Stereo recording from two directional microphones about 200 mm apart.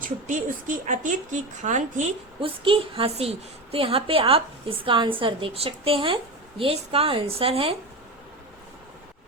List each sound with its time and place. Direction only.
0.0 s a woman's voice: 40° right (ahead or behind)